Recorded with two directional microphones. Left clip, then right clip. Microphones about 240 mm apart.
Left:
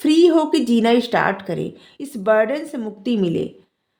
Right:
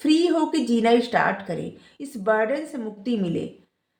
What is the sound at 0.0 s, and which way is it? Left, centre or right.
A woman's voice, left.